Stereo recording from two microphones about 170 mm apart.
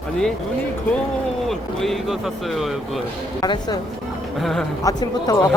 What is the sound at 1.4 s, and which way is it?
Speech, centre (ahead or behind).